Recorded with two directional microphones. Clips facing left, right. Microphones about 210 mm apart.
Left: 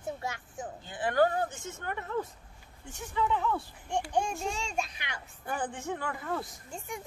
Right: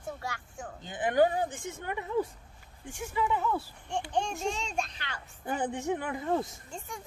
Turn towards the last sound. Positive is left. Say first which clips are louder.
# left 2 dB
turn(degrees=15)  # may be behind; listen again after turning